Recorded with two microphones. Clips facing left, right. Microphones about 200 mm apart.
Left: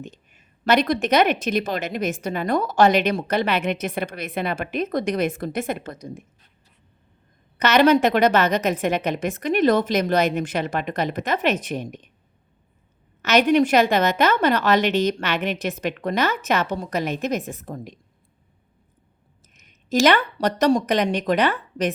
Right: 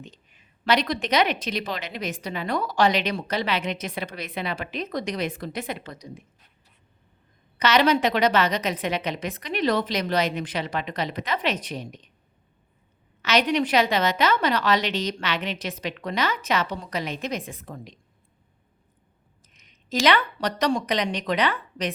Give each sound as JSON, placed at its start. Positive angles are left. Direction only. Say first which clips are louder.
{"t": 0.0, "sound": "a woman's voice", "louder": "left 6 dB", "side_deg": 50}
{"t": 7.6, "sound": "a woman's voice", "louder": "left 4 dB", "side_deg": 50}
{"t": 13.2, "sound": "a woman's voice", "louder": "left 5 dB", "side_deg": 45}
{"t": 19.5, "sound": "speech", "louder": "left 6 dB", "side_deg": 45}